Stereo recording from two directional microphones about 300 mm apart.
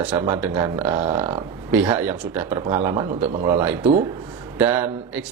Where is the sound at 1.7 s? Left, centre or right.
Centre.